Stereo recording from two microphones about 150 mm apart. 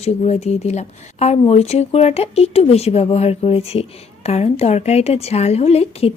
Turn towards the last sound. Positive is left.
turn(degrees=40)  # may be behind; listen again after turning